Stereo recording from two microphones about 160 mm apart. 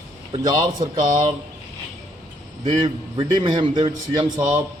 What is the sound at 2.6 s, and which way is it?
A man's voice, 30° right (ahead or behind).